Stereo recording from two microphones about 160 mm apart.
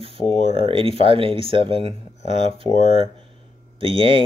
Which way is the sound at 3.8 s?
35° right (ahead or behind).